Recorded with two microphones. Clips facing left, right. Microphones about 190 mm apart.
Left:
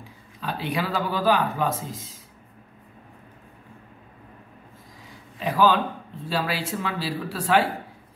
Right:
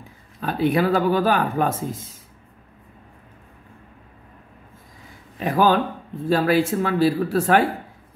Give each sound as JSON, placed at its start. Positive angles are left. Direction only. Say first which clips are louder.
{"t": 0.4, "sound": "speech", "louder": "right 8 dB", "side_deg": -50}
{"t": 5.4, "sound": "speech", "louder": "right 2 dB", "side_deg": -50}